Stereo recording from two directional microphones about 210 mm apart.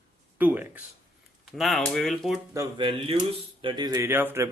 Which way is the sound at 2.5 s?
20° right (ahead or behind).